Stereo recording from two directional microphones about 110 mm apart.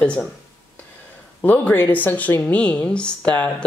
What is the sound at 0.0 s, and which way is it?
Speech, 10° left (ahead or behind).